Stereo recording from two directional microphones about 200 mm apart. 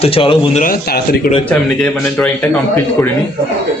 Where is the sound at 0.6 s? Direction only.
50° left (ahead or behind).